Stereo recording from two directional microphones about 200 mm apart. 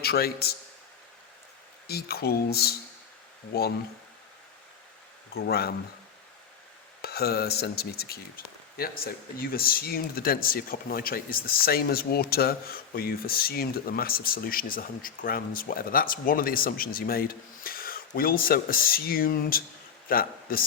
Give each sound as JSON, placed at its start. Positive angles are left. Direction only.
{"t": 0.0, "sound": "speech", "side_deg": 50}
{"t": 1.9, "sound": "speech", "side_deg": 50}
{"t": 5.3, "sound": "speech", "side_deg": 50}
{"t": 7.0, "sound": "a man's voice", "side_deg": 50}